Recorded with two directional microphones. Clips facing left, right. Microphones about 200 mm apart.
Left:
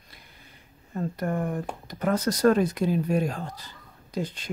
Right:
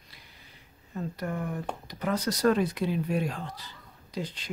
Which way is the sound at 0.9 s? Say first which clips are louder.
Left 5 dB; 50° left (ahead or behind).